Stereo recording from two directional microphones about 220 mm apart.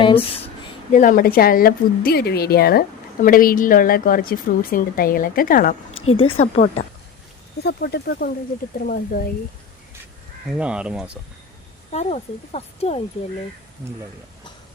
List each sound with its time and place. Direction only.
0.9 s a woman's voice: 40° left (ahead or behind)
6.1 s a woman's voice: 25° left (ahead or behind)
7.6 s a woman's voice: 45° left (ahead or behind)
10.4 s speech: 5° right (ahead or behind)
11.9 s speech: 30° left (ahead or behind)